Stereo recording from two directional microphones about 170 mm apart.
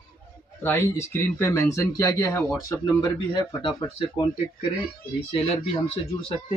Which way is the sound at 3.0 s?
30° left (ahead or behind).